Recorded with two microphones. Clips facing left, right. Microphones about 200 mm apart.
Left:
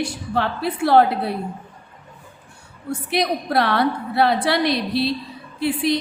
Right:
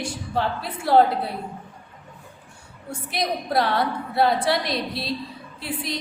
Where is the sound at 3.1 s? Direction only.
70° left (ahead or behind).